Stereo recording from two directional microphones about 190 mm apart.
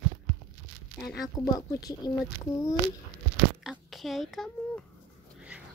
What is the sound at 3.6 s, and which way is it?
A child's voice, centre (ahead or behind).